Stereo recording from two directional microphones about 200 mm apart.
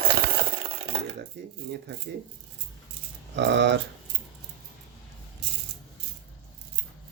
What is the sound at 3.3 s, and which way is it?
Speech, 60° right (ahead or behind).